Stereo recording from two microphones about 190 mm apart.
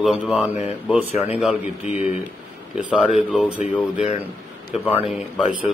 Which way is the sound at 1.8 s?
35° left (ahead or behind).